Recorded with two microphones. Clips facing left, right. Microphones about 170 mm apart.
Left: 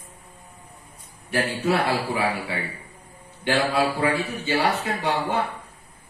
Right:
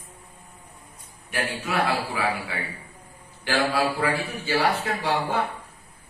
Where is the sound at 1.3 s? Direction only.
30° left (ahead or behind).